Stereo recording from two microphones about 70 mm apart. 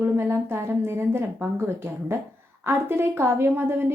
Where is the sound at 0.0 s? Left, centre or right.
Right.